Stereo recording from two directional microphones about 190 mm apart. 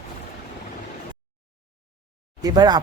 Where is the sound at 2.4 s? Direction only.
20° right (ahead or behind).